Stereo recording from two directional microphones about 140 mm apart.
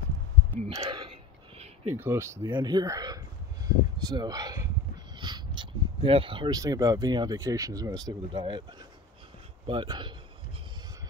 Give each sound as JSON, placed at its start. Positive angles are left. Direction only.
{"t": 0.7, "sound": "speech", "side_deg": -35}
{"t": 2.0, "sound": "speech", "side_deg": -15}
{"t": 2.4, "sound": "speech", "side_deg": -30}
{"t": 5.2, "sound": "a sound", "side_deg": -35}
{"t": 6.6, "sound": "speech", "side_deg": -25}
{"t": 9.7, "sound": "speech", "side_deg": -35}